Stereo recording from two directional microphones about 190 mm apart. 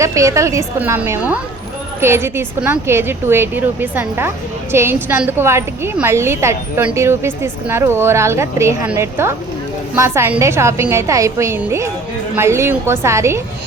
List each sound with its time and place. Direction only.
0.0 s a woman's voice: 15° right (ahead or behind)